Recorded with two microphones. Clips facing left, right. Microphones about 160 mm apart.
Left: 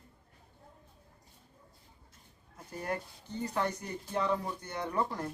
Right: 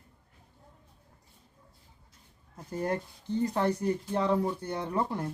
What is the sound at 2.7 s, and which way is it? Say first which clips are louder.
Speech: right 5 dB; 35° right (ahead or behind).